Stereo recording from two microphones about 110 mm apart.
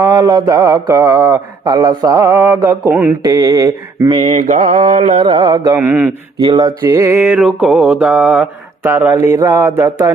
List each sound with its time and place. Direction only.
0.0 s mantra: 35° right (ahead or behind)
2.9 s mantra: 15° right (ahead or behind)
3.2 s mantra: 35° right (ahead or behind)
4.5 s carnatic music: 85° right
5.4 s mantra: 35° right (ahead or behind)
5.7 s mantra: 20° right (ahead or behind)
6.4 s mantra: 40° right (ahead or behind)
6.9 s speech: 25° right (ahead or behind)
7.3 s mantra: 10° right (ahead or behind)
8.8 s speech: 25° right (ahead or behind)